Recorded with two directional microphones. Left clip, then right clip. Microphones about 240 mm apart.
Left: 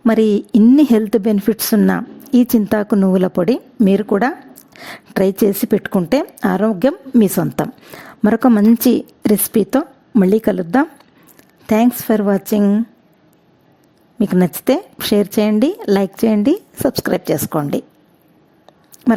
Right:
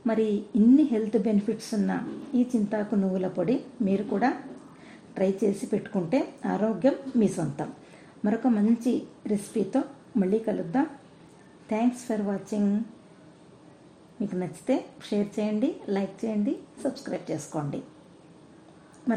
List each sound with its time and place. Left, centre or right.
0.0 s a woman's voice: left
14.2 s a woman's voice: left
19.1 s speech: left